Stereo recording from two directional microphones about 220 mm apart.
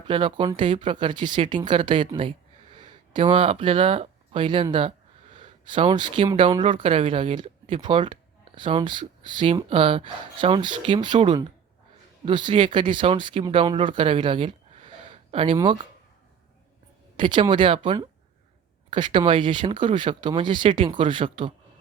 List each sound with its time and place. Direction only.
0.1 s speech: 20° right (ahead or behind)
17.2 s speech: 20° right (ahead or behind)